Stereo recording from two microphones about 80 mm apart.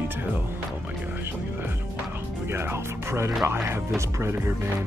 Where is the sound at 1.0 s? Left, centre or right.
Right.